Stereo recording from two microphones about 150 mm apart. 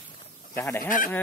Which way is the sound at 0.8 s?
65° left (ahead or behind).